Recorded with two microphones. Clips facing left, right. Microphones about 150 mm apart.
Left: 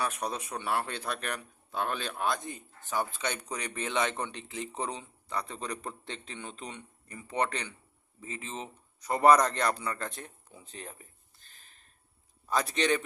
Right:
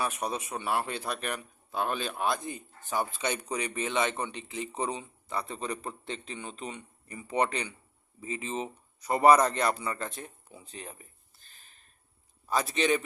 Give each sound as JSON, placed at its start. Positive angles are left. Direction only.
{"t": 0.0, "sound": "speech", "side_deg": -10}
{"t": 12.5, "sound": "speech", "side_deg": -5}